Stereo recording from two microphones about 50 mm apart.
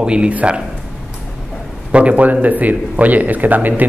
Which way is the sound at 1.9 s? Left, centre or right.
Right.